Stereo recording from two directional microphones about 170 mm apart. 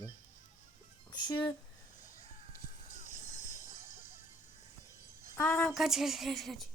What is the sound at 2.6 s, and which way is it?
Music, 45° left (ahead or behind).